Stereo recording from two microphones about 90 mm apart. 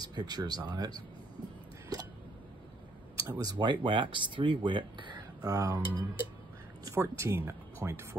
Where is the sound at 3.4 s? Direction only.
60° right (ahead or behind).